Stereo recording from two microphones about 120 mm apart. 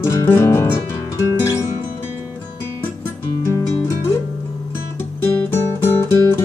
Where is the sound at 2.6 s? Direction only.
20° left (ahead or behind).